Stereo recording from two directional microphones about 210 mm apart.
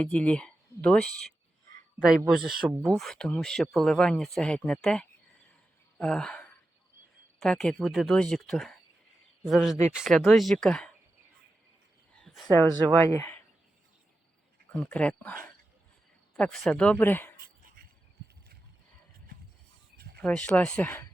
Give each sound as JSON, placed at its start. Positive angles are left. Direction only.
{"t": 0.0, "sound": "speech", "side_deg": 5}
{"t": 12.2, "sound": "a sound", "side_deg": 0}
{"t": 13.1, "sound": "speech", "side_deg": 10}
{"t": 14.7, "sound": "speech", "side_deg": 5}
{"t": 20.0, "sound": "a sound", "side_deg": -50}
{"t": 20.2, "sound": "speech", "side_deg": 5}